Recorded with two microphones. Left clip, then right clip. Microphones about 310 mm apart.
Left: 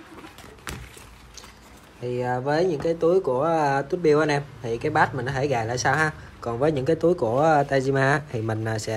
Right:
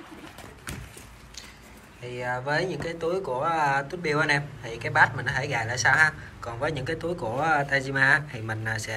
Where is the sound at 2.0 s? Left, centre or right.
Left.